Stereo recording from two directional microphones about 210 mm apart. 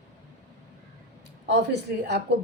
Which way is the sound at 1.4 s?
55° right (ahead or behind).